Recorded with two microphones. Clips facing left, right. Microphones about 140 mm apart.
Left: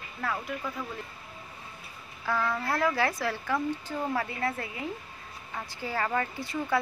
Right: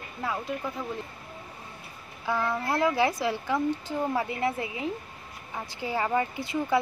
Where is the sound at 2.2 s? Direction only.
20° right (ahead or behind).